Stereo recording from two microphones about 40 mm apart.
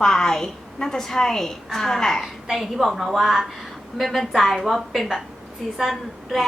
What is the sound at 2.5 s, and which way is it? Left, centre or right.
A woman's voice, centre.